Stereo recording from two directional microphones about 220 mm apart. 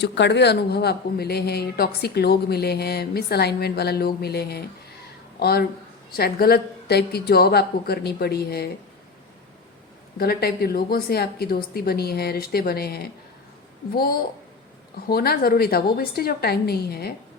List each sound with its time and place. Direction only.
0.0 s speech: 50° left (ahead or behind)
10.2 s speech: 45° left (ahead or behind)